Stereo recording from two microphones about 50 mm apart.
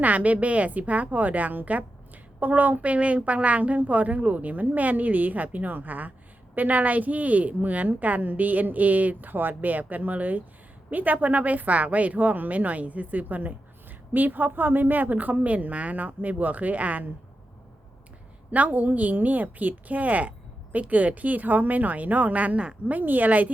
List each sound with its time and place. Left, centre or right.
0.0 s speech: right
18.5 s speech: right